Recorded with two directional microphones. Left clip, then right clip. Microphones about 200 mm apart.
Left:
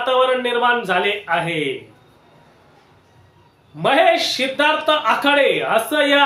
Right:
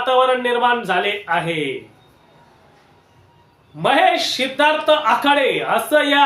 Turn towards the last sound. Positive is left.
turn(degrees=0)  # may be behind; listen again after turning